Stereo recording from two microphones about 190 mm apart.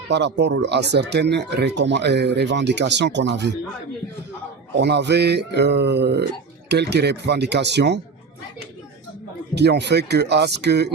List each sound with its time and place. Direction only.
0.1 s speech: 65° right (ahead or behind)
4.8 s speech: 65° right (ahead or behind)
9.6 s speech: 60° right (ahead or behind)